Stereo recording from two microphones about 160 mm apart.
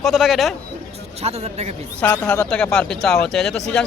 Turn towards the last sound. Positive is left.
turn(degrees=5)  # may be behind; listen again after turning